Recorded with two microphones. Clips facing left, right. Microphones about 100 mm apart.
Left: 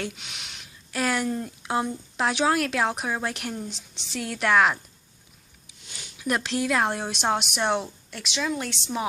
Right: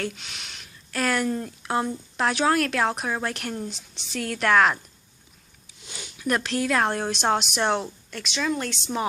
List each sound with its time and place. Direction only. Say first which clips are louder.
0.0 s a sound: right 2 dB; 15° left (ahead or behind)
1.5 s a woman's voice: right 1 dB; 10° left (ahead or behind)
3.7 s a woman's voice: right 1 dB; 20° left (ahead or behind)
6.1 s a woman's voice: right 1 dB; 15° left (ahead or behind)